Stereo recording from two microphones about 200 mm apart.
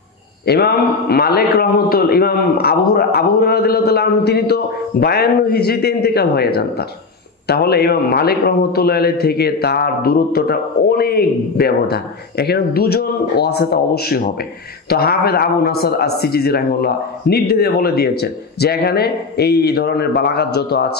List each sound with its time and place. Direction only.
0.5 s a man's voice: 50° left (ahead or behind)